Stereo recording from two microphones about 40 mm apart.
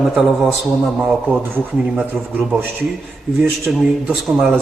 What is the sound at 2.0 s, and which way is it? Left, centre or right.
Speech, right.